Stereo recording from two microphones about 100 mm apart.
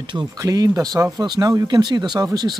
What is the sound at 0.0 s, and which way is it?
Speech, 50° right (ahead or behind).